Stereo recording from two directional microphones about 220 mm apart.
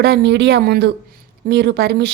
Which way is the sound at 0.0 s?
50° right (ahead or behind).